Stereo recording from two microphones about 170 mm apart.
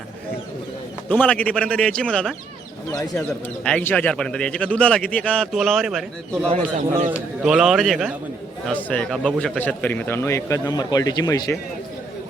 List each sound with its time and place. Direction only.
1.2 s a man's voice: 10° left (ahead or behind)
6.5 s speech: 45° right (ahead or behind)
7.1 s a man's voice: 5° right (ahead or behind); by 11.4 s 20° left (ahead or behind)